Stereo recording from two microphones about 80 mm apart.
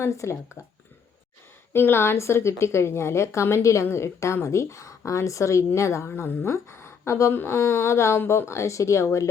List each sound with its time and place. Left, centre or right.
0.0 s speech: left
1.7 s speech: left